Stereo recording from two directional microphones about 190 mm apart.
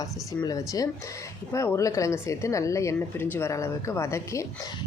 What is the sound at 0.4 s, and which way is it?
A woman's voice, 20° left (ahead or behind).